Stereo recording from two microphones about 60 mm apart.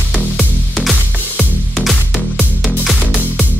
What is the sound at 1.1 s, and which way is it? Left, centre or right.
Music, right.